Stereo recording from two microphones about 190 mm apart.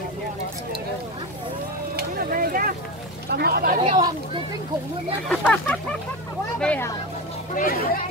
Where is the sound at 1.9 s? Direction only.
50° right (ahead or behind).